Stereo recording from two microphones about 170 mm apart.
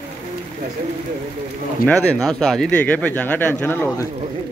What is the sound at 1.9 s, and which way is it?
Speech, 5° left (ahead or behind).